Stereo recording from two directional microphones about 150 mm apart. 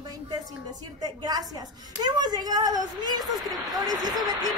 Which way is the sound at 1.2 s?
25° right (ahead or behind).